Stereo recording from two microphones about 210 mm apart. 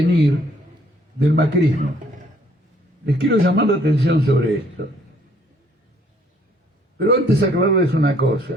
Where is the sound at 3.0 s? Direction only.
50° right (ahead or behind).